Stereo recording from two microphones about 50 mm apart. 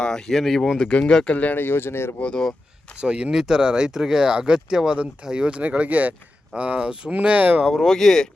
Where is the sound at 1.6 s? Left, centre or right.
Left.